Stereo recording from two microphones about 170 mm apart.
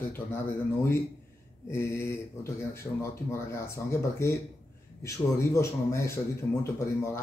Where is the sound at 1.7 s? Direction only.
15° left (ahead or behind).